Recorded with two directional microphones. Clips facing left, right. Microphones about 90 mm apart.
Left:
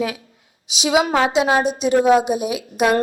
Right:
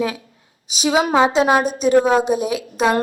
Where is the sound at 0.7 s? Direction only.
40° right (ahead or behind).